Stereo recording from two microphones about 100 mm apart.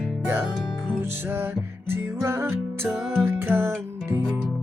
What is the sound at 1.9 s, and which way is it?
Music, 25° right (ahead or behind).